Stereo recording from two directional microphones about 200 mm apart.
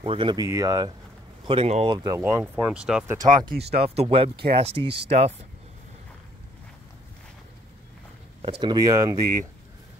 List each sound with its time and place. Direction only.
0.0 s speech: 25° right (ahead or behind)
1.5 s speech: 30° right (ahead or behind)
2.0 s speech: 15° right (ahead or behind)
3.2 s speech: 20° right (ahead or behind)
3.4 s speech: 55° right (ahead or behind)
3.8 s speech: 30° right (ahead or behind)
8.4 s speech: 25° right (ahead or behind)